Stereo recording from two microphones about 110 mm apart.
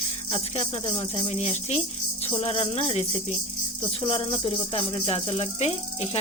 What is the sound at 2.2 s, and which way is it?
Speech, 60° left (ahead or behind).